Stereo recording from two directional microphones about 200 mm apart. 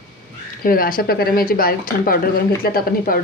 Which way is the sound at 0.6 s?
45° left (ahead or behind).